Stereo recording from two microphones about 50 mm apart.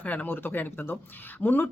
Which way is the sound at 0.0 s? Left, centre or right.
Left.